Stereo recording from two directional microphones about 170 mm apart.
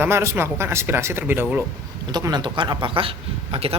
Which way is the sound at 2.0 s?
25° right (ahead or behind).